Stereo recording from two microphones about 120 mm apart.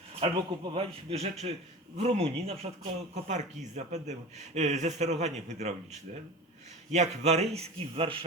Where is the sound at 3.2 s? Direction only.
75° right (ahead or behind); by 8.2 s 50° right (ahead or behind).